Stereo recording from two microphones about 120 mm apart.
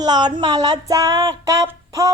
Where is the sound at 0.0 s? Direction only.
35° right (ahead or behind).